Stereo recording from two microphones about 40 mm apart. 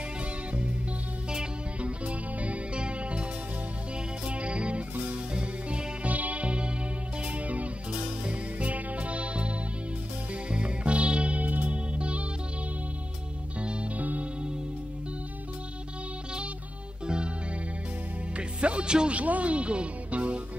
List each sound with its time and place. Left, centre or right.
1.3 s music: right
4.3 s music: right
6.1 s music: right
11.9 s music: right
13.6 s music: right
13.9 s music: right
17.0 s music: right
18.3 s music: right
19.1 s music: right